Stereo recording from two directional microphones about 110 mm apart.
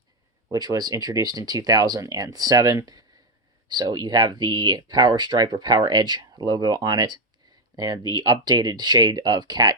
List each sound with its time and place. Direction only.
0.4 s speech: 30° right (ahead or behind)